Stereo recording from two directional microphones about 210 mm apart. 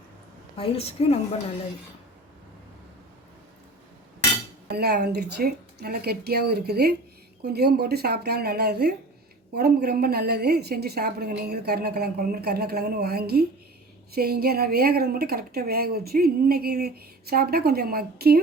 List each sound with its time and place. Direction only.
0.5 s a woman's voice: 25° left (ahead or behind)
4.7 s a woman's voice: 50° right (ahead or behind)